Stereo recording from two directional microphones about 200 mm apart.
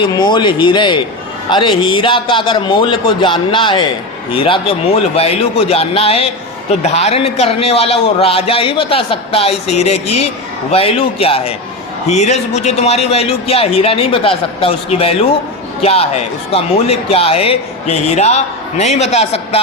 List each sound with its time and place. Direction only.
0.0 s a man's voice: 20° left (ahead or behind)